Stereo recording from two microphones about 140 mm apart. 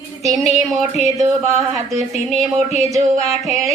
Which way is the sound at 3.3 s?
Centre (ahead or behind).